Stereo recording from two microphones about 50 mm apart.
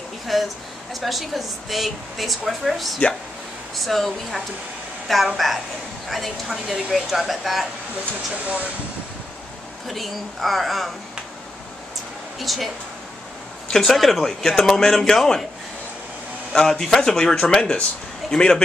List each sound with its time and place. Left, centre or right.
0.3 s a woman's voice: centre
8.0 s speech: right
9.8 s a woman's voice: centre
12.4 s a woman's voice: centre
13.7 s speech: centre
16.5 s speech: centre